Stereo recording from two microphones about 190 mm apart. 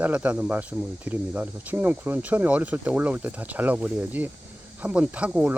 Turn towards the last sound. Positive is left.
turn(degrees=-5)  # may be behind; listen again after turning